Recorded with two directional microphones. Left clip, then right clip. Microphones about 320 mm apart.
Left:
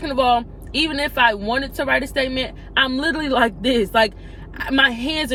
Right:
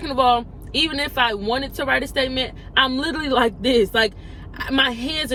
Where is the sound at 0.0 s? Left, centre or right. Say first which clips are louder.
Even; centre.